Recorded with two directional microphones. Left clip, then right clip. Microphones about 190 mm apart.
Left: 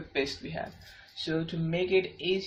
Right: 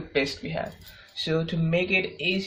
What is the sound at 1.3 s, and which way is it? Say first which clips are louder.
Speech: right 6 dB; 45° right (ahead or behind).